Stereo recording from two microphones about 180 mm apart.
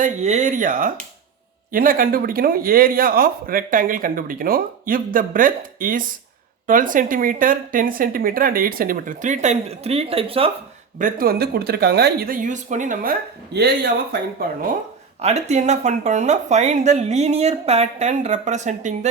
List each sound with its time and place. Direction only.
0.0 s speech: 40° right (ahead or behind)
10.9 s speech: 50° right (ahead or behind)
15.2 s speech: 40° right (ahead or behind)